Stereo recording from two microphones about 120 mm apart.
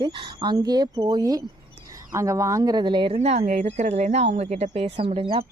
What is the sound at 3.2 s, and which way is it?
Speech, 65° right (ahead or behind).